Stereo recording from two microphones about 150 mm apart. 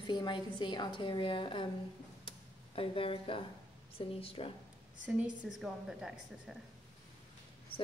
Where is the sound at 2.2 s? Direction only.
40° left (ahead or behind).